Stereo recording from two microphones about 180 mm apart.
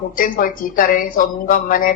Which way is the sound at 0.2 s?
50° left (ahead or behind).